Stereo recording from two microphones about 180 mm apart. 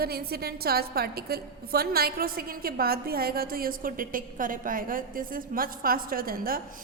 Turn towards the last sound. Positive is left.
turn(degrees=-55)  # may be behind; listen again after turning